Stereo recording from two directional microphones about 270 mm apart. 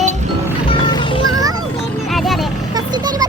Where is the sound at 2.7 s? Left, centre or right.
Centre.